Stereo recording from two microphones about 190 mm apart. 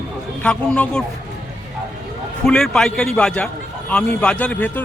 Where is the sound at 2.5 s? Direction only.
5° left (ahead or behind).